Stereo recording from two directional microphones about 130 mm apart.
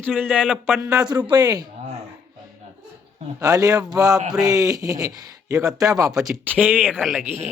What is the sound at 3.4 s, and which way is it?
Speech, 25° right (ahead or behind).